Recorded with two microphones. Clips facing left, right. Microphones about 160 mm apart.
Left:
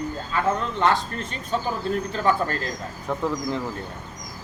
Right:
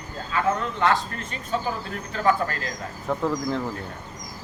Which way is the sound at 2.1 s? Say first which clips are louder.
Right 3 dB; 30° left (ahead or behind).